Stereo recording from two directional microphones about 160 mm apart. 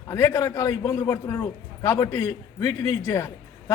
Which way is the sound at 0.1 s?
20° left (ahead or behind).